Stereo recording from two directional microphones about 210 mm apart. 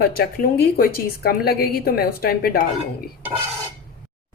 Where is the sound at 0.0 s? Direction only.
45° left (ahead or behind).